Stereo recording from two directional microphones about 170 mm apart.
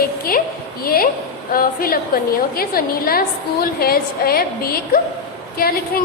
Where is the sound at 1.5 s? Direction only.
60° left (ahead or behind).